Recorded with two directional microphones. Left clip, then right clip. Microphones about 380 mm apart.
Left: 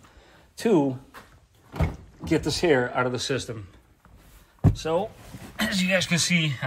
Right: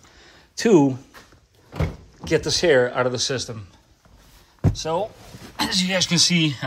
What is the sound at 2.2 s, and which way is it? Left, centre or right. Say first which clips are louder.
Speech: right 4 dB; right.